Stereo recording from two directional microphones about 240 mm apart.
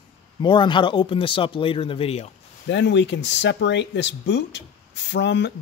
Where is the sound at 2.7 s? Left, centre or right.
Left.